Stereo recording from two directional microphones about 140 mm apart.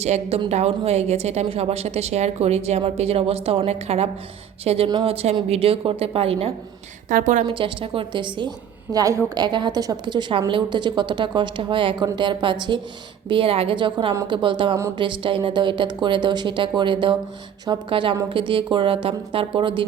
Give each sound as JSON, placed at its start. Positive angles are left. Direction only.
{"t": 0.0, "sound": "a woman's voice", "side_deg": -45}
{"t": 4.9, "sound": "a woman's voice", "side_deg": -30}
{"t": 5.1, "sound": "a woman's voice", "side_deg": -45}
{"t": 7.1, "sound": "a woman's voice", "side_deg": -70}
{"t": 7.4, "sound": "a woman's voice", "side_deg": -35}